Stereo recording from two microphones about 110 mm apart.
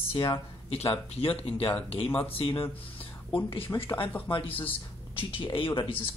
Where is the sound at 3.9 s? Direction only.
15° left (ahead or behind).